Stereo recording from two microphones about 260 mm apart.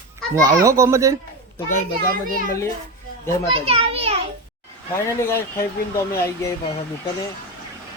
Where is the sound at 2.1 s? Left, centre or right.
Right.